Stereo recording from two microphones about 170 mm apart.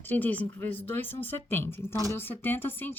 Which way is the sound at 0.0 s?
10° left (ahead or behind).